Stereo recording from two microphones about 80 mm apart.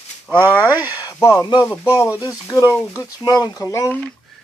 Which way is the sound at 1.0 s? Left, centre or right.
Left.